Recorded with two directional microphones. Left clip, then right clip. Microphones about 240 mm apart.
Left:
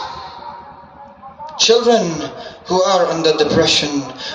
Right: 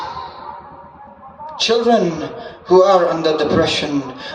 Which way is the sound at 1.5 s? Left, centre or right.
Centre.